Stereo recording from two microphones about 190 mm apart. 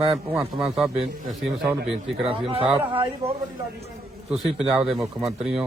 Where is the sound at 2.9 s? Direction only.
25° right (ahead or behind).